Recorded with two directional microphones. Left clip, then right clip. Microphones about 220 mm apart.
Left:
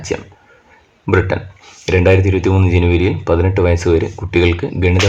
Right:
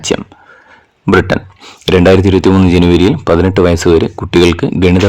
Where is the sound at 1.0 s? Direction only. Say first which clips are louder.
Right 5 dB; 45° right (ahead or behind).